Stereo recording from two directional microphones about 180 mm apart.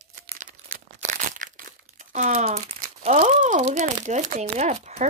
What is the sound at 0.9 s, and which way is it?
Crumpling, 40° right (ahead or behind).